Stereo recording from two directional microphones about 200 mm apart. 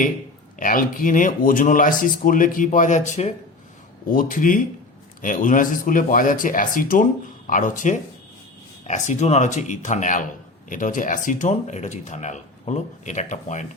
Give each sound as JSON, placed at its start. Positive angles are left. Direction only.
{"t": 0.6, "sound": "speech", "side_deg": 45}